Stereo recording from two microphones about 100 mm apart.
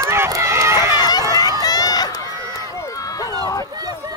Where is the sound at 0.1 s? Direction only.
25° right (ahead or behind).